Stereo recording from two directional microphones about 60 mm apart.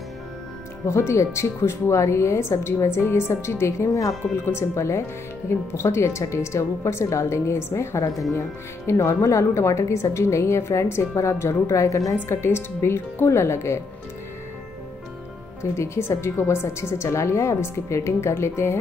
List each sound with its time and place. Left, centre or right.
0.8 s a woman's voice: left
12.3 s a woman's voice: left
15.7 s a woman's voice: left